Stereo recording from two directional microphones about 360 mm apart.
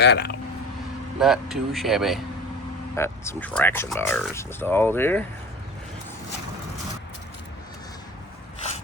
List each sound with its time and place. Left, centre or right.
0.0 s speech: left
1.2 s speech: centre